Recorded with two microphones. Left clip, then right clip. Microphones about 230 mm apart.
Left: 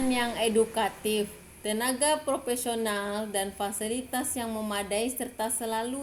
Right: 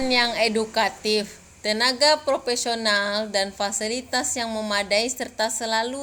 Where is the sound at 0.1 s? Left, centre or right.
Right.